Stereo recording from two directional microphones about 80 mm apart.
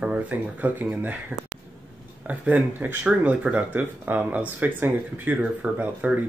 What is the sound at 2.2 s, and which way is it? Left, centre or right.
Speech, centre.